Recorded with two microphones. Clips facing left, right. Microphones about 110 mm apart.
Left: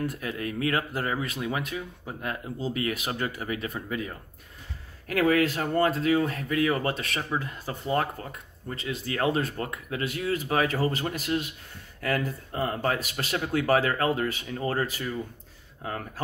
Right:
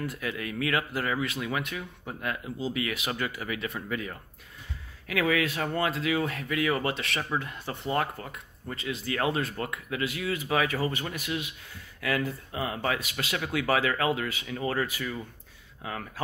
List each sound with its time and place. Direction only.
0.2 s speech: 35° left (ahead or behind)